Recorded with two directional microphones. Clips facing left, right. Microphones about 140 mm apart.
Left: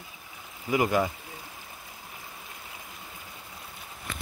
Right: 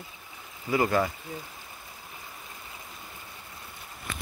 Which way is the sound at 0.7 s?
15° left (ahead or behind).